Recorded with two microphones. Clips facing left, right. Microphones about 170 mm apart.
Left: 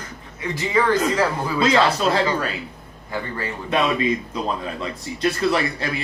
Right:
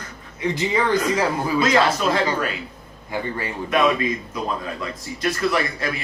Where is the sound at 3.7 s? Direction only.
30° left (ahead or behind).